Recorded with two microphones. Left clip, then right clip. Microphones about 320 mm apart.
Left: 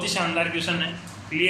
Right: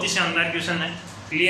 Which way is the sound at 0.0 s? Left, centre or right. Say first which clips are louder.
Right 2 dB; centre.